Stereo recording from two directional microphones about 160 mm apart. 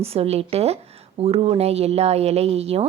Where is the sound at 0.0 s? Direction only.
40° right (ahead or behind).